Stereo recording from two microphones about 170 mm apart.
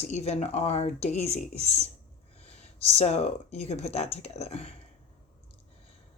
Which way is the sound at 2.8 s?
40° left (ahead or behind).